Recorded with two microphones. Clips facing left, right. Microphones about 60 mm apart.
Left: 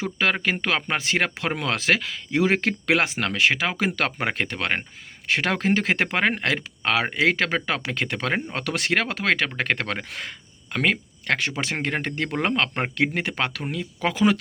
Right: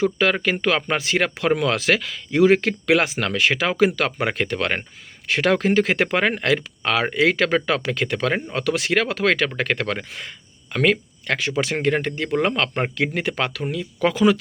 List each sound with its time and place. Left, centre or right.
0.0 s speech: left
8.5 s speech: left
9.2 s speech: left
10.1 s speech: left
10.7 s speech: left